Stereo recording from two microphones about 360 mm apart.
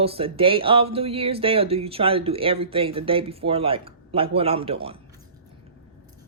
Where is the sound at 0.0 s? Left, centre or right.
Centre.